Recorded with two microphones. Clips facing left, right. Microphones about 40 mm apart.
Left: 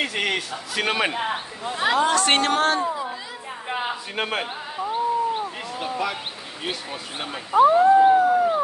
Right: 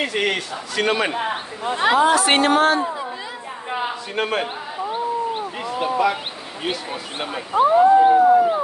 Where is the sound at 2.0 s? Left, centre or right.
Centre.